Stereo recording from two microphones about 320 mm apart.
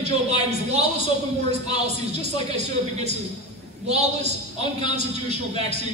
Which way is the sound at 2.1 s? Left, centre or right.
Centre.